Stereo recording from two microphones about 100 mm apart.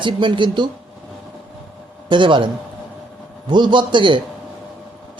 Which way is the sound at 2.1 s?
55° right (ahead or behind).